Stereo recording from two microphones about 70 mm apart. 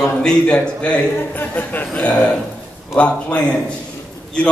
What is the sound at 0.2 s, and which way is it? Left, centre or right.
A man's voice, centre.